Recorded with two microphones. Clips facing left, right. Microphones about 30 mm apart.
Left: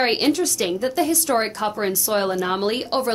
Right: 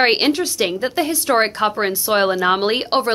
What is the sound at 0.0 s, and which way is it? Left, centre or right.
A woman's voice, right.